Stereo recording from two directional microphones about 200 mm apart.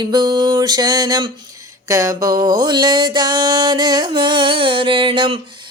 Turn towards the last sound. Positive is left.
turn(degrees=-25)  # may be behind; listen again after turning